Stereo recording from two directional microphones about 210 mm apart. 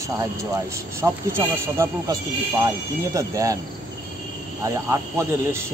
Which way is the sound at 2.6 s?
15° right (ahead or behind).